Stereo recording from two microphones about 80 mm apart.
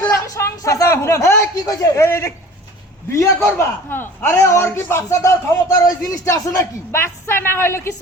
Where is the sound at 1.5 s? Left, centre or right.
Left.